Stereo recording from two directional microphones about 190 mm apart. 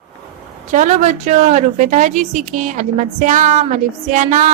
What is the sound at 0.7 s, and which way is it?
A woman's voice, 40° right (ahead or behind).